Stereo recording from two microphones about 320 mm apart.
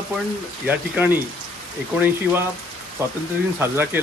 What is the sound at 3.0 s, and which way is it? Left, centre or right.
Speech, centre.